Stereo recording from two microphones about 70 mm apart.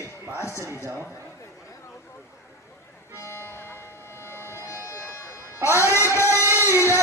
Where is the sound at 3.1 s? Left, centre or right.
Left.